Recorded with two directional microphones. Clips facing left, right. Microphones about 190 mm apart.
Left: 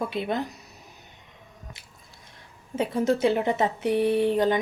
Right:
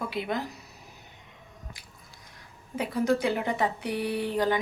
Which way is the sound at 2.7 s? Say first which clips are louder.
Left 2 dB; 25° left (ahead or behind).